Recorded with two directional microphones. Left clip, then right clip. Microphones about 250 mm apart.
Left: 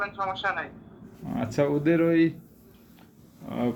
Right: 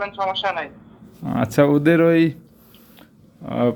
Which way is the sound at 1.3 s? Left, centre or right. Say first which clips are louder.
Right 9 dB; right.